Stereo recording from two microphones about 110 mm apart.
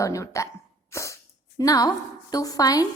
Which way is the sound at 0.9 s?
25° left (ahead or behind).